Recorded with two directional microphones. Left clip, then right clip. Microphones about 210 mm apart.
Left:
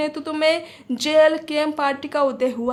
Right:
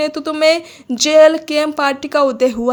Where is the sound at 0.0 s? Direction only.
25° right (ahead or behind).